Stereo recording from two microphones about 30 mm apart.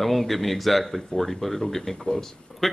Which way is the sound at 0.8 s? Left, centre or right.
Centre.